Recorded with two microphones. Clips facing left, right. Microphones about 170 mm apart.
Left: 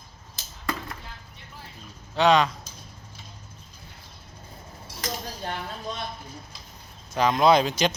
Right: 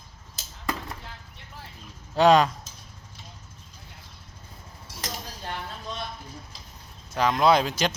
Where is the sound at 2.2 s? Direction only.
45° right (ahead or behind).